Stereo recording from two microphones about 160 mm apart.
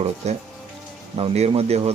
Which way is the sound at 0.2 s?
45° right (ahead or behind).